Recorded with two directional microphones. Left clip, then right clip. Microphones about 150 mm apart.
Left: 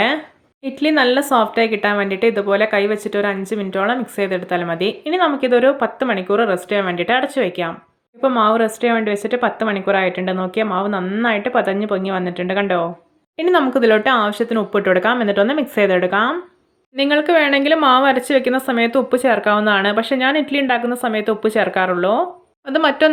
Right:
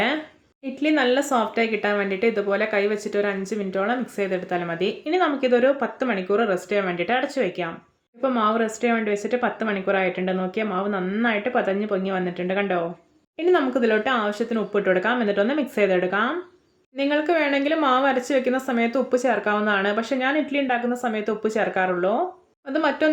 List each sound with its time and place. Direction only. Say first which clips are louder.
0.6 s speech: left 6 dB; 35° left (ahead or behind)